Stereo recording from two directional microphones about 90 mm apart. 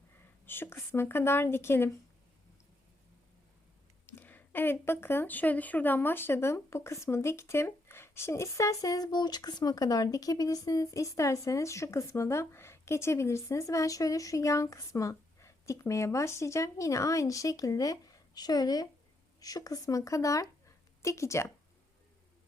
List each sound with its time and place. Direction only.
0.4 s speech: 25° left (ahead or behind)
4.0 s speech: 25° left (ahead or behind)